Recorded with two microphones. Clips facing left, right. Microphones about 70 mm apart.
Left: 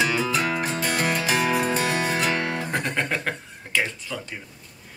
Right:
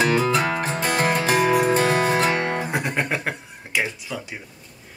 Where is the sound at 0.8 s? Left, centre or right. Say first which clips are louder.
Right 5 dB; right.